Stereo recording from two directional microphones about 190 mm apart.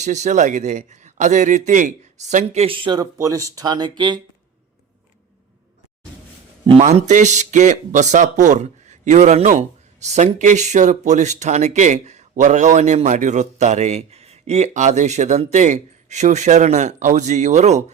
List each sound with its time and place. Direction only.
0.0 s speech: 40° right (ahead or behind)
6.7 s speech: 35° right (ahead or behind)